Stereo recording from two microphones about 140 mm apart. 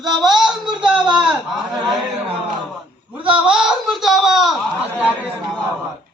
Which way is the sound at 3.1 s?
10° right (ahead or behind).